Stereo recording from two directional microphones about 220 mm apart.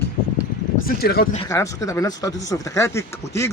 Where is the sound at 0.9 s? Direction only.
45° left (ahead or behind).